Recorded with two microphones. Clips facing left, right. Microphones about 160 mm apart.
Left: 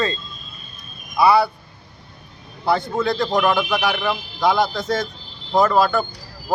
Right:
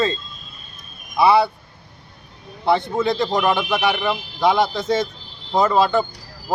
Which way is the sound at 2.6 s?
20° right (ahead or behind).